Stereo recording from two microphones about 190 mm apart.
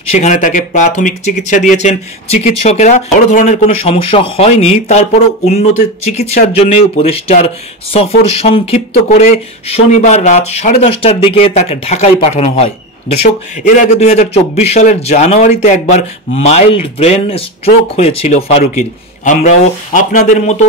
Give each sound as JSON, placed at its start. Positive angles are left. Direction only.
{"t": 0.1, "sound": "speech", "side_deg": 40}
{"t": 13.7, "sound": "speech", "side_deg": 35}